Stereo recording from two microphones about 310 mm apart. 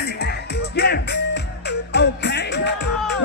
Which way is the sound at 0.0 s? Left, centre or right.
Left.